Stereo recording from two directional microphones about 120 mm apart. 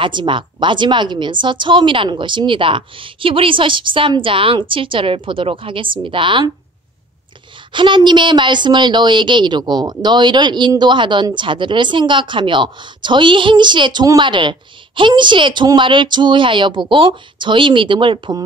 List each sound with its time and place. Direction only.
0.0 s a woman's voice: 40° right (ahead or behind)
7.7 s speech: 40° right (ahead or behind)